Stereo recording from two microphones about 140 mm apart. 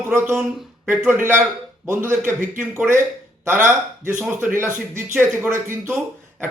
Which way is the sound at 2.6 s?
15° right (ahead or behind).